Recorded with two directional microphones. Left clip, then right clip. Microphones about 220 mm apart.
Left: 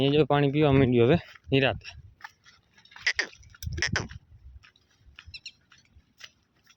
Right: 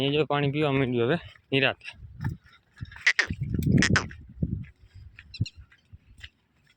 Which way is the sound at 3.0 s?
5° left (ahead or behind).